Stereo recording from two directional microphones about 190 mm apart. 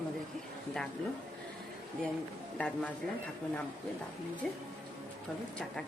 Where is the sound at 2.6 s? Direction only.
5° left (ahead or behind).